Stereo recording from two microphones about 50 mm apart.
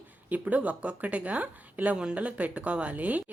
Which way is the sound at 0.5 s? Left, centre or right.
Right.